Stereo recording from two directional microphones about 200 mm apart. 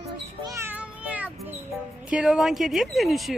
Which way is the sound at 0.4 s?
15° right (ahead or behind).